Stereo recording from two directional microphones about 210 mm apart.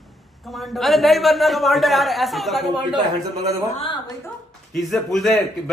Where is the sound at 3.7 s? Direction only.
25° left (ahead or behind).